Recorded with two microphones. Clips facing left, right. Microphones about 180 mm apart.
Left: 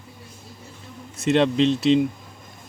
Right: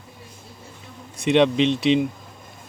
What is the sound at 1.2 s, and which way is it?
Speech, centre (ahead or behind).